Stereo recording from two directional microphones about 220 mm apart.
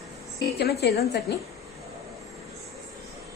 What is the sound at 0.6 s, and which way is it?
Speech, 45° left (ahead or behind).